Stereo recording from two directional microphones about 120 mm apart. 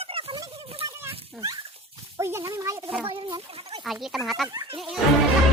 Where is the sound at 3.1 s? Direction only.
40° right (ahead or behind).